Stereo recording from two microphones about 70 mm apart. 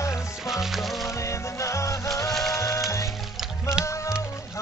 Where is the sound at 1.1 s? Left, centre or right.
Left.